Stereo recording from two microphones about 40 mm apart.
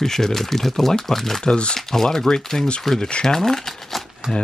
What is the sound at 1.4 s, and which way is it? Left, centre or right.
Speech, centre.